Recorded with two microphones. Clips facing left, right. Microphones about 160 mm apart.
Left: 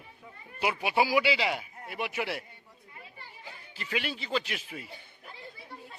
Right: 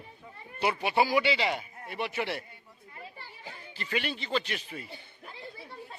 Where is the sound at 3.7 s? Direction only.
5° left (ahead or behind).